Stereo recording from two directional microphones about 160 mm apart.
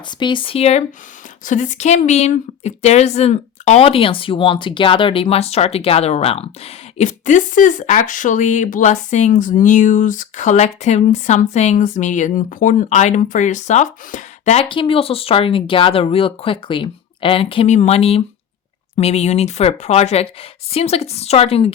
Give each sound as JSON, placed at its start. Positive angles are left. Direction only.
{"t": 0.2, "sound": "a woman's voice", "side_deg": 30}